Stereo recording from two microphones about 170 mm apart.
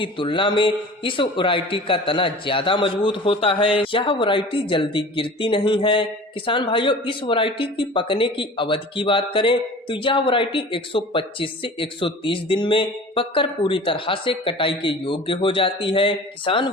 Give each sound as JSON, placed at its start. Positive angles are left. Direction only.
{"t": 0.0, "sound": "a man's voice", "side_deg": 30}